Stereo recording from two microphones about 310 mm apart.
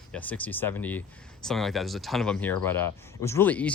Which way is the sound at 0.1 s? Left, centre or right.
Centre.